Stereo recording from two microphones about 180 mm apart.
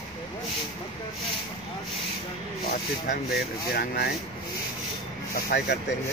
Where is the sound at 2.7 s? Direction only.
60° left (ahead or behind).